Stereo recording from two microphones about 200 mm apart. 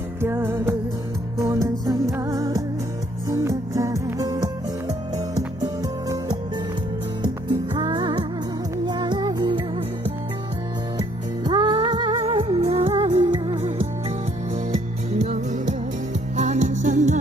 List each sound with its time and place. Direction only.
0.2 s music: 10° right (ahead or behind)
7.4 s music: 25° right (ahead or behind)
11.0 s music: 20° right (ahead or behind); by 17.2 s 40° right (ahead or behind)